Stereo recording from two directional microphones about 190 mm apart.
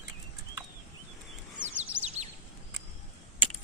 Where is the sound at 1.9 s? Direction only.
25° right (ahead or behind).